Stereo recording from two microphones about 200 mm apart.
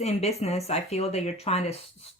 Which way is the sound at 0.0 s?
30° left (ahead or behind).